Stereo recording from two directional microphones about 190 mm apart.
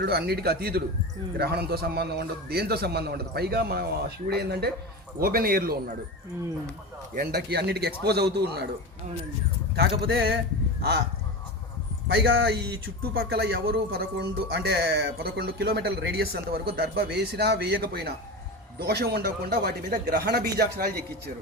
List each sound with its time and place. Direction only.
0.0 s speech: 60° right (ahead or behind)
7.1 s speech: 55° right (ahead or behind)
9.7 s speech: 60° right (ahead or behind)
12.1 s speech: 60° right (ahead or behind)